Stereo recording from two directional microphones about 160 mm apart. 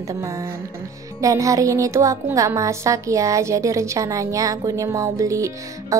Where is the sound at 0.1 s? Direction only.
20° right (ahead or behind).